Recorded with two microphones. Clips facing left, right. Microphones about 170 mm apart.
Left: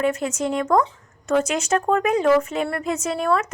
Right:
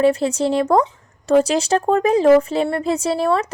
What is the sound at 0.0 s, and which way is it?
Speech, 30° right (ahead or behind).